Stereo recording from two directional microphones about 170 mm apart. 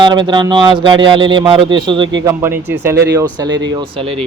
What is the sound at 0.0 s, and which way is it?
Speech, 25° right (ahead or behind).